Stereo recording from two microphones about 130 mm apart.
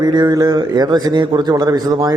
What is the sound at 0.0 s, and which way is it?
A man's voice, 30° right (ahead or behind).